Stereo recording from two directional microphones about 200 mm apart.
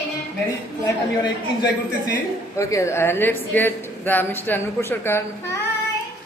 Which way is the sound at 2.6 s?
15° left (ahead or behind).